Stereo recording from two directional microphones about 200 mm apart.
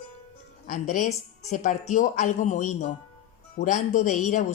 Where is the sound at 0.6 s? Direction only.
40° left (ahead or behind).